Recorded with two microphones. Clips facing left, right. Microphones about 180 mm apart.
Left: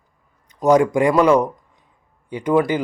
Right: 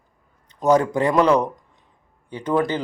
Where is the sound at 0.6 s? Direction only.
10° left (ahead or behind).